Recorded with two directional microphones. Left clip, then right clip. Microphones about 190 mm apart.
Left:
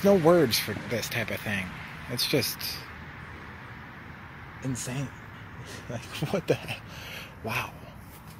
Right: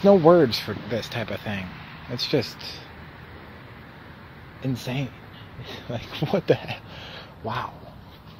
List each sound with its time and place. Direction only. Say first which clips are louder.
0.0 s speech: right 5 dB; 10° right (ahead or behind)
4.6 s speech: right 5 dB; 20° right (ahead or behind)
7.1 s a sound: right 2 dB; centre (ahead or behind)